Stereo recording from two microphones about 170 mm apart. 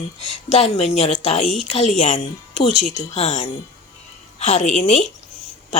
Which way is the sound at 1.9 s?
40° left (ahead or behind).